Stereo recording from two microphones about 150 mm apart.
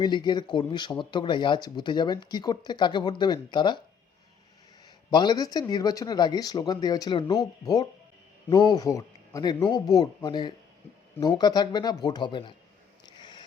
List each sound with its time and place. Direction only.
0.0 s speech: 30° left (ahead or behind)
5.1 s speech: 30° left (ahead or behind)
13.1 s a sound: 30° left (ahead or behind)